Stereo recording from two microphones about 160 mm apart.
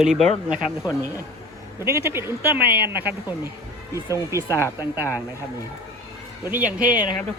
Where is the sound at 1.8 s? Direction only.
15° right (ahead or behind).